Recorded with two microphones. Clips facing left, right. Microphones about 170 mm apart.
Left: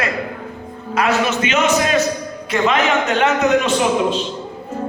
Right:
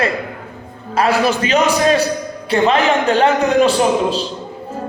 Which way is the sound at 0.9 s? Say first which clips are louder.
Right 2 dB; 30° right (ahead or behind).